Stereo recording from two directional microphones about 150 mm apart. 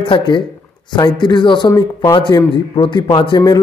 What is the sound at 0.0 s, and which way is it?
A man's voice, 35° left (ahead or behind).